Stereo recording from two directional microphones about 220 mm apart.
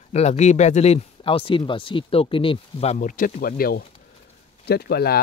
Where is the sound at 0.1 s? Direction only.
30° left (ahead or behind).